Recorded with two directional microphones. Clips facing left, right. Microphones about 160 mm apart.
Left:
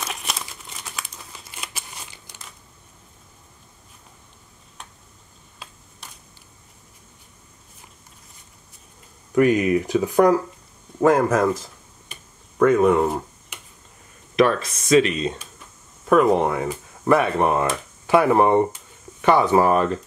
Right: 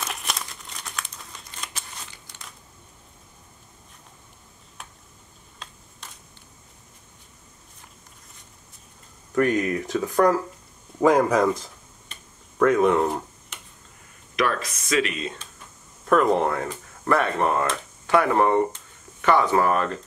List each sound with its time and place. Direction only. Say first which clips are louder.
0.0 s crumpling: left 1 dB; centre (ahead or behind)
5.6 s a sound: left 1 dB; 5° left (ahead or behind)
9.3 s speech: left 5 dB; 10° left (ahead or behind)
11.0 s speech: left 1 dB; centre (ahead or behind)
12.1 s finger snapping: left 2 dB; 5° left (ahead or behind)
14.3 s speech: left 6 dB; 25° left (ahead or behind)
16.1 s speech: left 3 dB; 5° left (ahead or behind)